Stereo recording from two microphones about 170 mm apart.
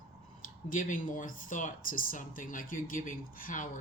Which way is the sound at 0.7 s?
50° left (ahead or behind).